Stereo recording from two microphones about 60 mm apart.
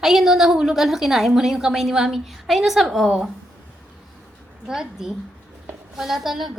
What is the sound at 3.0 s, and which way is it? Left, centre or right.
Speech, centre.